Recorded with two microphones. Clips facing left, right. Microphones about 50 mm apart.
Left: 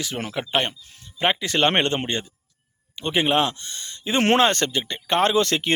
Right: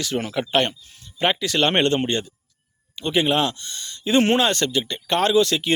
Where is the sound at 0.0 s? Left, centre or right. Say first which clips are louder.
Right 4 dB; centre.